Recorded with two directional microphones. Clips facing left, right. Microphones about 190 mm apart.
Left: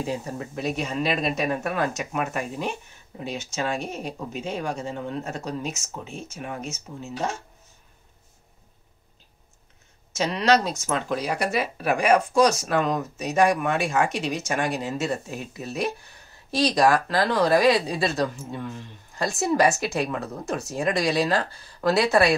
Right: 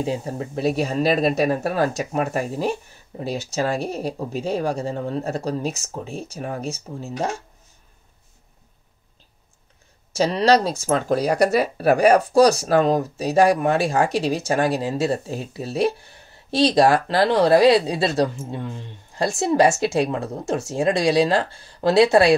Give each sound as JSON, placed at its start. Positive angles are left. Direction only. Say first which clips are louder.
{"t": 0.0, "sound": "speech", "louder": "right 4 dB", "side_deg": -30}
{"t": 10.1, "sound": "speech", "louder": "right 4 dB", "side_deg": -35}